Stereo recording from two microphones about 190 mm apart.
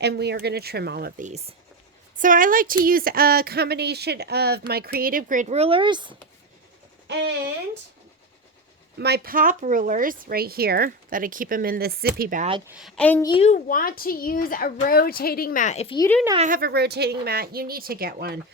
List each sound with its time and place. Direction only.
0.0 s speech: 60° right (ahead or behind)
1.2 s speech: 35° right (ahead or behind)
2.1 s speech: 45° right (ahead or behind); by 6.1 s 25° right (ahead or behind)
7.1 s speech: 65° right (ahead or behind)
9.0 s speech: 60° right (ahead or behind)
12.6 s a woman's voice: 5° right (ahead or behind)
13.0 s a woman's voice: 10° left (ahead or behind)
13.2 s a child's voice: 25° left (ahead or behind)
13.5 s a woman's voice: 45° left (ahead or behind)
16.4 s speech: 50° right (ahead or behind)